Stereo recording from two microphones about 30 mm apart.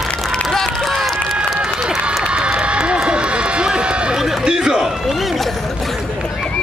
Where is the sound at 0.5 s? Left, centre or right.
Centre.